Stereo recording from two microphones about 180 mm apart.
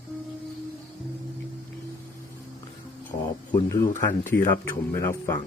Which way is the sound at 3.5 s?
15° left (ahead or behind).